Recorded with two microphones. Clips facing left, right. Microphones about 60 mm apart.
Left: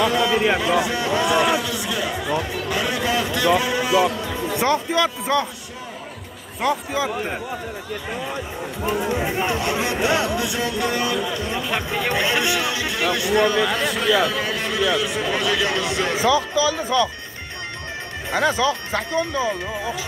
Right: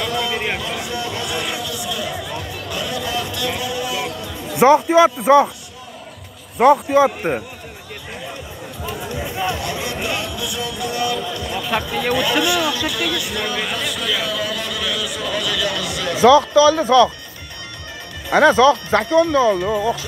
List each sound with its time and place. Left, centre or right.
0.0 s a sound: left
4.6 s a man's voice: right
6.6 s speech: right
8.8 s speech: left
11.1 s speech: left
16.2 s speech: right
18.3 s speech: right